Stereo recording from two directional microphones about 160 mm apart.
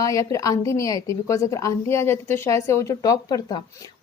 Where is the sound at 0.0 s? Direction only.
20° left (ahead or behind).